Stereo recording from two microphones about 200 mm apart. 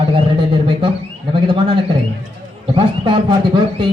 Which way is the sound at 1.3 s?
25° right (ahead or behind).